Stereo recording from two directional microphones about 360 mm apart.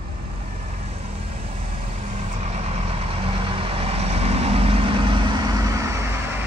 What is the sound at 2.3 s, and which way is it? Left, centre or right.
Vehicle, centre.